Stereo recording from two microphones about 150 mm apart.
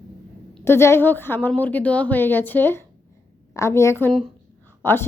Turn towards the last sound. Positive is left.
turn(degrees=15)  # may be behind; listen again after turning